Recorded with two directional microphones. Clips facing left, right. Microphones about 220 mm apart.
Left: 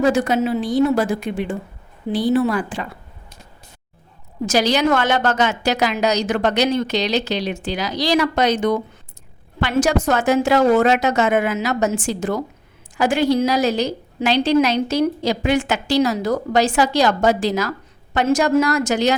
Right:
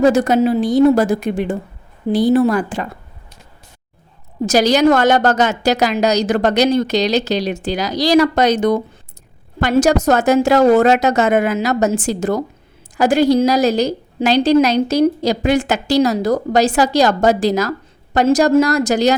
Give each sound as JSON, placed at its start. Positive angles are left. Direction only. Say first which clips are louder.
{"t": 0.0, "sound": "a woman's voice", "louder": "right 5 dB", "side_deg": -40}
{"t": 4.4, "sound": "a woman's voice", "louder": "right 5 dB", "side_deg": -40}